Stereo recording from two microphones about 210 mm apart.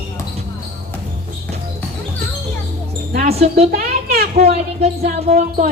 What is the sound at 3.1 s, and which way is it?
Music, 45° right (ahead or behind).